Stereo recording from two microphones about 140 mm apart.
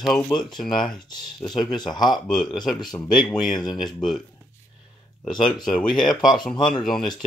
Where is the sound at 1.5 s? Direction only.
Centre (ahead or behind).